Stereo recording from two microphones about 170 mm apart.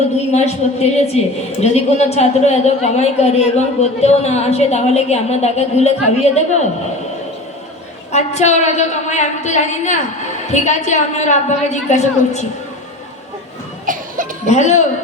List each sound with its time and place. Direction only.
0.3 s a woman's voice: 40° left (ahead or behind)
8.1 s a woman's voice: 40° left (ahead or behind)
13.8 s cough: 50° right (ahead or behind)
14.4 s a woman's voice: 45° left (ahead or behind)